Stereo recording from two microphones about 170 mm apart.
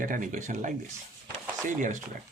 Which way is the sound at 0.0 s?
50° right (ahead or behind).